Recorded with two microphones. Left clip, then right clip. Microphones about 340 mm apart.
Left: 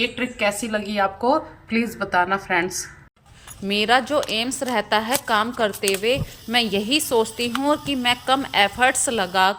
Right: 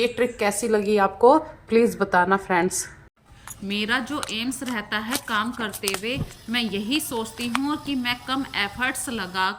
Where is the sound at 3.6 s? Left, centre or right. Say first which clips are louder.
Left 6 dB; centre.